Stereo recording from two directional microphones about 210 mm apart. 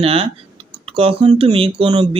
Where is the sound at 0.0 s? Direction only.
25° right (ahead or behind).